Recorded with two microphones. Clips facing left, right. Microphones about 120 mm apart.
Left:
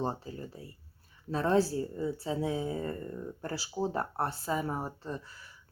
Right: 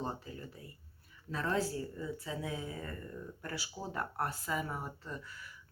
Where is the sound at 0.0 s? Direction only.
30° left (ahead or behind).